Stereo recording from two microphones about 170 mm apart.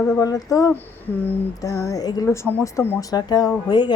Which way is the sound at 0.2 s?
20° left (ahead or behind).